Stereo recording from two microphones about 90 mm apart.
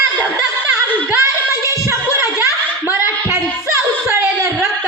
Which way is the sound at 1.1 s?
30° right (ahead or behind).